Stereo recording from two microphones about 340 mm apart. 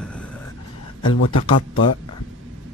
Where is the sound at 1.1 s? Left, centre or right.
Left.